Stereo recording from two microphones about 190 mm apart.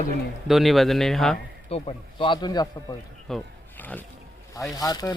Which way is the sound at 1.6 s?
30° left (ahead or behind).